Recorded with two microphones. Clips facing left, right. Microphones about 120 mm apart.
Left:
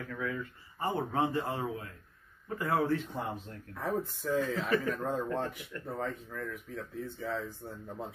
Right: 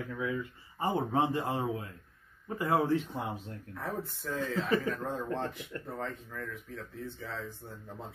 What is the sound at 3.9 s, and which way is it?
Speech, 15° left (ahead or behind).